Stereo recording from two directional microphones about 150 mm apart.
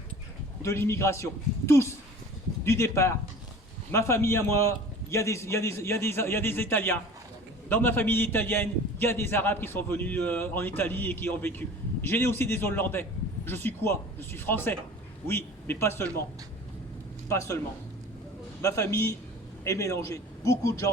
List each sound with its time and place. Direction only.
0.6 s a man's voice: 20° left (ahead or behind)
17.2 s a man's voice: 20° left (ahead or behind)
18.6 s a man's voice: 20° left (ahead or behind)